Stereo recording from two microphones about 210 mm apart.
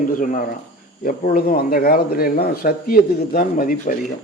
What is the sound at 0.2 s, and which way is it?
Speech, 40° left (ahead or behind).